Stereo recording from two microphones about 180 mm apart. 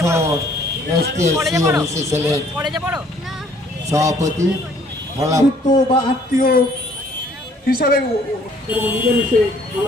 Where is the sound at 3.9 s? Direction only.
20° right (ahead or behind).